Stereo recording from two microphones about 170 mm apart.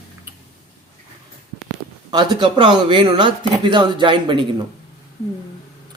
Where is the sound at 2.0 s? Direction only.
25° right (ahead or behind).